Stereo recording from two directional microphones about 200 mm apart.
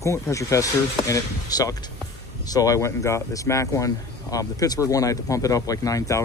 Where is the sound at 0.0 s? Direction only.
15° left (ahead or behind).